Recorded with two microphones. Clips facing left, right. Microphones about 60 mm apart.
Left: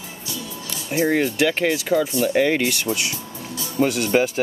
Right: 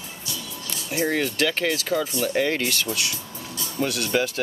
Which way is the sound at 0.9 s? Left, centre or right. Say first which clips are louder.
Left 4 dB; left.